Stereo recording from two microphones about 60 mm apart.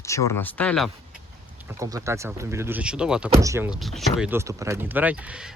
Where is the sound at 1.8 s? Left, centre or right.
Right.